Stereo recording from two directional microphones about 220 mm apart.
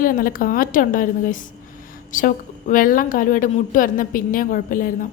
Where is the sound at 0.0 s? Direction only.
40° left (ahead or behind).